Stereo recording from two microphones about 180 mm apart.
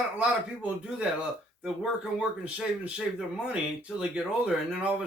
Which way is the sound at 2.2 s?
5° right (ahead or behind).